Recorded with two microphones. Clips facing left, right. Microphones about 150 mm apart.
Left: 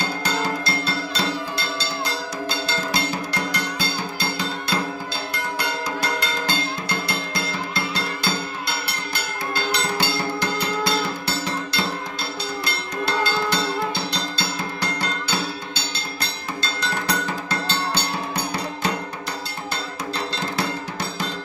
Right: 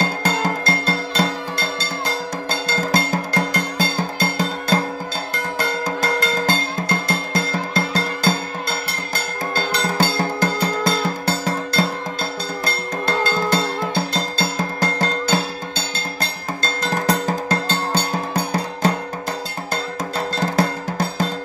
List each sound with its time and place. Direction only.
0.0 s music: 45° right (ahead or behind)